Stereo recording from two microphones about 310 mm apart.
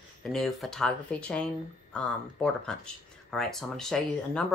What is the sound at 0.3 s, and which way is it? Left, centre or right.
Speech, centre.